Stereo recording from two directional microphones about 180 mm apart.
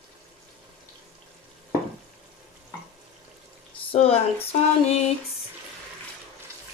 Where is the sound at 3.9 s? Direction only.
35° left (ahead or behind).